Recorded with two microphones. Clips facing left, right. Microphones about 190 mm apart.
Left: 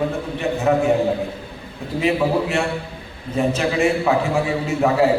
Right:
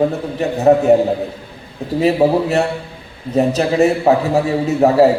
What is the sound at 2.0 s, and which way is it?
A man's voice, 40° right (ahead or behind).